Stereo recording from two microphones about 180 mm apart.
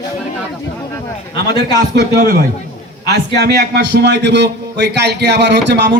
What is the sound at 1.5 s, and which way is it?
A man's voice, 60° right (ahead or behind).